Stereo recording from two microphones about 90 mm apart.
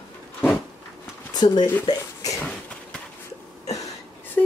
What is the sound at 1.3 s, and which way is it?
Speech, 50° left (ahead or behind).